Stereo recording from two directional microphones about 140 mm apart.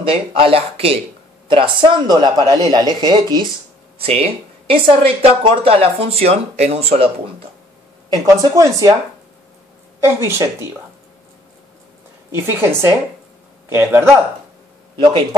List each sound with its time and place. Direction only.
0.0 s speech: 40° right (ahead or behind)
4.0 s speech: 45° right (ahead or behind)
8.1 s speech: 25° right (ahead or behind)
10.0 s speech: 20° right (ahead or behind)
12.4 s speech: 20° right (ahead or behind)
15.0 s speech: 35° right (ahead or behind)